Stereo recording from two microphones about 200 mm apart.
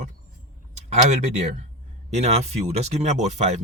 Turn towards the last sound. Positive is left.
turn(degrees=-35)  # may be behind; listen again after turning